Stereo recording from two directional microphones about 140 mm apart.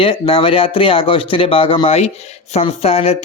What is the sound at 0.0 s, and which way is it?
Speech, 40° left (ahead or behind).